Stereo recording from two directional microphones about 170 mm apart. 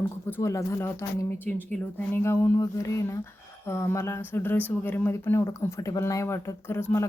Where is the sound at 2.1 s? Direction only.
15° left (ahead or behind).